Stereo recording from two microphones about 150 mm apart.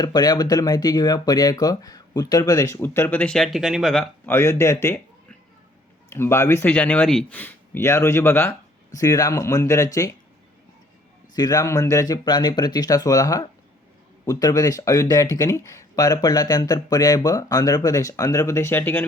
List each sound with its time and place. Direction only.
0.0 s speech: 30° left (ahead or behind); by 4.1 s centre (ahead or behind)
4.3 s speech: 15° left (ahead or behind)
6.1 s speech: 15° left (ahead or behind)
11.3 s speech: 25° left (ahead or behind)